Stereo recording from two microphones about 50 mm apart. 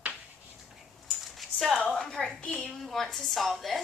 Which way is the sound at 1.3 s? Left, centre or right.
Centre.